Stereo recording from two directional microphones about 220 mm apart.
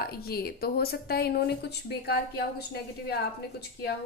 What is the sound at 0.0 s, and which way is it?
A woman's voice, 45° left (ahead or behind).